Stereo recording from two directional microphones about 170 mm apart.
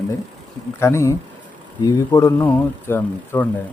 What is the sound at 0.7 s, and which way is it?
A man's voice, 15° left (ahead or behind).